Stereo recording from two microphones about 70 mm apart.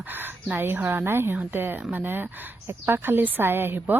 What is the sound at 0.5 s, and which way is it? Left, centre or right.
A woman's voice, right.